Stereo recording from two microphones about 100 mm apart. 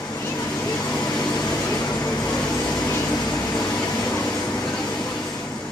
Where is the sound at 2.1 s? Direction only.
10° left (ahead or behind).